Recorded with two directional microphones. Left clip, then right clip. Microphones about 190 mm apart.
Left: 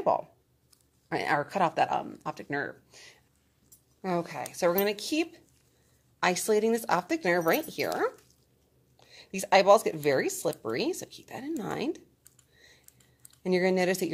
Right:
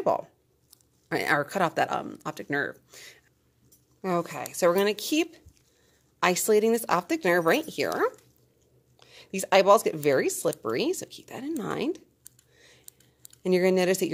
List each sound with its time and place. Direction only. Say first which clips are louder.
0.0 s speech: right 1 dB; 35° right (ahead or behind)
12.5 s typing: even; 30° right (ahead or behind)
13.4 s speech: right 3 dB; 30° right (ahead or behind)